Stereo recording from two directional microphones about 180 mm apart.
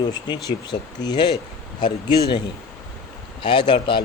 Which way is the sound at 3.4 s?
25° left (ahead or behind).